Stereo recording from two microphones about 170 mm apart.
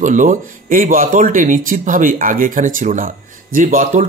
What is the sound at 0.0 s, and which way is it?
Speech, 50° right (ahead or behind).